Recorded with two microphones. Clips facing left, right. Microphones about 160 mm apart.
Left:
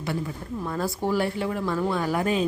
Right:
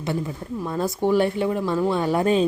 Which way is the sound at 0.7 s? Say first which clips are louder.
Right 5 dB; 20° right (ahead or behind).